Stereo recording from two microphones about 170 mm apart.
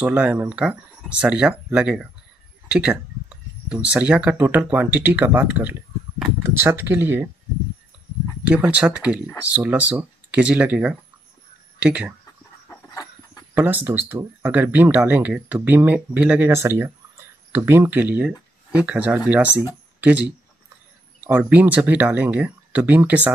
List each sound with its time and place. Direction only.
0.0 s speech: 5° right (ahead or behind)
8.5 s speech: 10° right (ahead or behind)
12.6 s dog: 20° left (ahead or behind)
13.6 s speech: 10° right (ahead or behind)